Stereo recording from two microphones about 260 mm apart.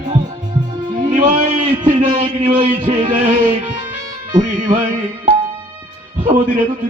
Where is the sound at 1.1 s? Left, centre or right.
Right.